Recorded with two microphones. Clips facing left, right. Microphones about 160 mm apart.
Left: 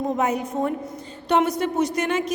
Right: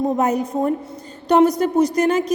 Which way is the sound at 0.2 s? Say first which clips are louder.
Right 4 dB; 40° right (ahead or behind).